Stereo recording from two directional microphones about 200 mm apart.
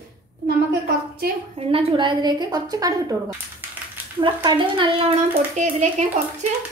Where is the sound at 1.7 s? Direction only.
25° right (ahead or behind).